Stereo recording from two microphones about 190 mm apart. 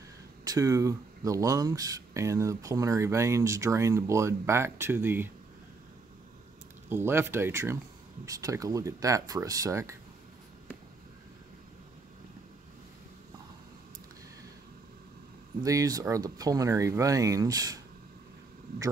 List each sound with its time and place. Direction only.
0.5 s speech: 15° right (ahead or behind)
6.9 s speech: 10° right (ahead or behind)
15.6 s speech: 15° right (ahead or behind)